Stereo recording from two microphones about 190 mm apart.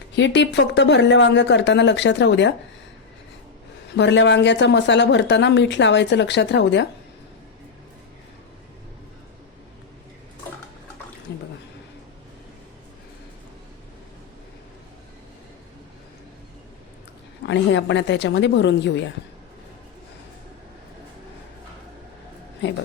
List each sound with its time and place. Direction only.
0.2 s a woman's voice: 65° left (ahead or behind)
3.9 s a woman's voice: 70° left (ahead or behind)
11.3 s drip: 65° left (ahead or behind)
17.4 s a woman's voice: 70° left (ahead or behind)